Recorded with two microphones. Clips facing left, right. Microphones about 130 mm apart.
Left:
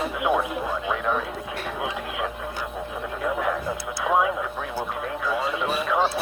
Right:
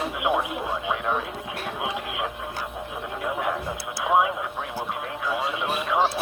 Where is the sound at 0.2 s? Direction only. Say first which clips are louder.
Left 1 dB; 15° right (ahead or behind).